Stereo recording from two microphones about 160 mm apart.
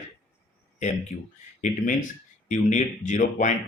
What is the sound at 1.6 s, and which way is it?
Speech, 50° left (ahead or behind).